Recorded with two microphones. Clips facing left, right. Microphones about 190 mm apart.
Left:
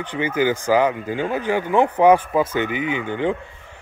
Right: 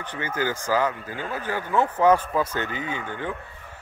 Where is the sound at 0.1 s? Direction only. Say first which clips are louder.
Left 7 dB; 15° left (ahead or behind).